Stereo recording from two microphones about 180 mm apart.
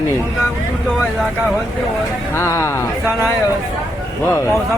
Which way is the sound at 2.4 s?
15° left (ahead or behind).